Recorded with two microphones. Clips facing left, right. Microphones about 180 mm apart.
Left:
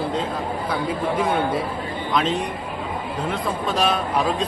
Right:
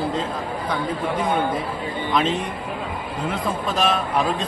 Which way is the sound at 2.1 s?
Centre (ahead or behind).